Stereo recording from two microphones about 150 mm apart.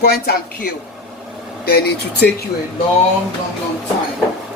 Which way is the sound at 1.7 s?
90° left.